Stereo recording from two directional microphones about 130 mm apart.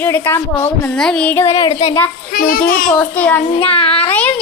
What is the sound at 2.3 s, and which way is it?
Speech, 90° left.